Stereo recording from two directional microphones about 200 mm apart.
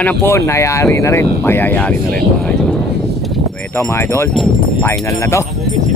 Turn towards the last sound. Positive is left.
turn(degrees=15)  # may be behind; listen again after turning